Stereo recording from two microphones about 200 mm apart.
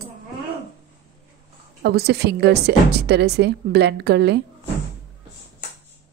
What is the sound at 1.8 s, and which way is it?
A woman's voice, 55° right (ahead or behind).